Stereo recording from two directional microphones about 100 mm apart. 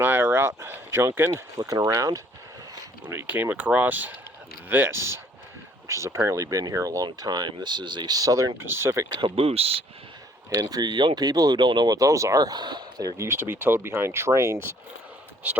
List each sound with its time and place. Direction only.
0.0 s a sound: 20° right (ahead or behind)
1.4 s speech: 35° right (ahead or behind)
3.1 s speech: 20° right (ahead or behind); by 8.4 s 35° right (ahead or behind)
8.6 s speech: 25° right (ahead or behind)
9.2 s speech: 70° right (ahead or behind)
10.5 s speech: 40° right (ahead or behind)